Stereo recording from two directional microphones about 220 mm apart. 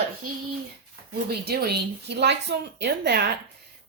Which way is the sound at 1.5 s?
45° right (ahead or behind).